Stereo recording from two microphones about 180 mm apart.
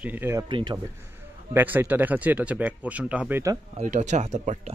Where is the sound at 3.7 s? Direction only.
40° right (ahead or behind).